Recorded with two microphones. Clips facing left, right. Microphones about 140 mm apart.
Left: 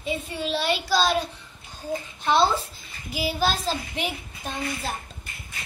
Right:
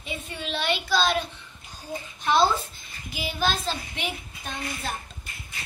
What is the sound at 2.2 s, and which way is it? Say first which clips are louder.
Babbling: even; 30° left (ahead or behind).